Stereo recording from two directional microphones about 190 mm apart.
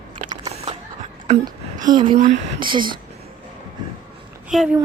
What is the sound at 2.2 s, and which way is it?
Speech, 40° right (ahead or behind).